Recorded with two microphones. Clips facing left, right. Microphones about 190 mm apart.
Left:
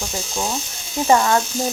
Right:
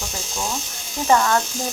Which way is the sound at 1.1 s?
15° left (ahead or behind).